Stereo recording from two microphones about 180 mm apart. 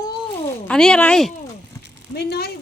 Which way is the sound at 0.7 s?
5° left (ahead or behind).